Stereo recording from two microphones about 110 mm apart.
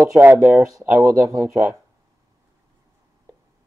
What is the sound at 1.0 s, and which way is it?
Speech, 30° right (ahead or behind).